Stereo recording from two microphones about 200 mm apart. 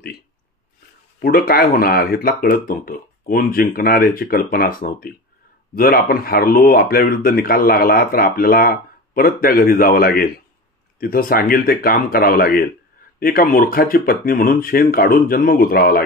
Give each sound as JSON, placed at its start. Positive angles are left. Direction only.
{"t": 1.2, "sound": "speech", "side_deg": 50}